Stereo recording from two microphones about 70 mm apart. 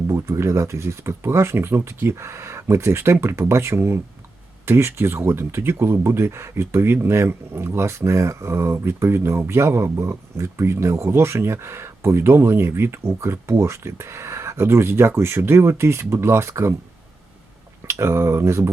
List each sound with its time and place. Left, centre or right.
0.1 s speech: right
17.8 s speech: right